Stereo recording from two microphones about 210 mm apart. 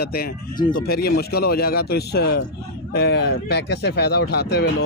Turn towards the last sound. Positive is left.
turn(degrees=50)  # may be behind; listen again after turning